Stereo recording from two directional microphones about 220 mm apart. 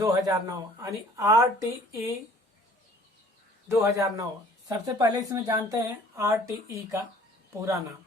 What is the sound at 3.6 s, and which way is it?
Speech, 15° right (ahead or behind).